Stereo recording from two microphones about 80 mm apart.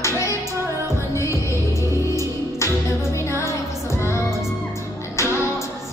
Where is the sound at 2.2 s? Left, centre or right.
Left.